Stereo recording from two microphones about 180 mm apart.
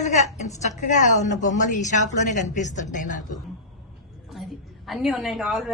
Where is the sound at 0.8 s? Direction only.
40° left (ahead or behind).